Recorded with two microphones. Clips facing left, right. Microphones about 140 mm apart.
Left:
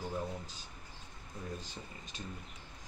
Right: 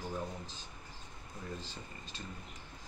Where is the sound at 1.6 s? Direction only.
15° left (ahead or behind).